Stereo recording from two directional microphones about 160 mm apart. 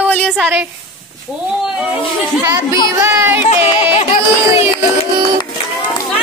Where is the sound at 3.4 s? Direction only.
40° left (ahead or behind).